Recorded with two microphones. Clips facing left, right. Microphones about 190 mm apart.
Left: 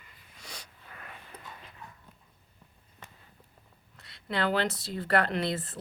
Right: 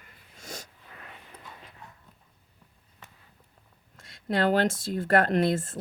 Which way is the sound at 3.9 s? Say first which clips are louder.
Right 5 dB; 45° right (ahead or behind).